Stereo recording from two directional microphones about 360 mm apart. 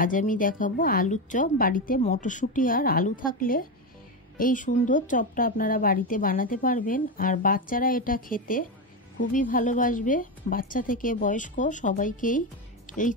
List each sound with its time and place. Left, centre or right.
0.0 s a woman's voice: left
12.9 s music: left